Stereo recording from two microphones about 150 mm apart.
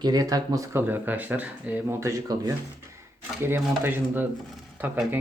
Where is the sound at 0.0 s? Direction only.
25° right (ahead or behind).